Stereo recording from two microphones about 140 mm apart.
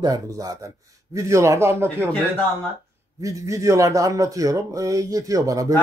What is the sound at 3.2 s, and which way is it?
Speech, 25° right (ahead or behind).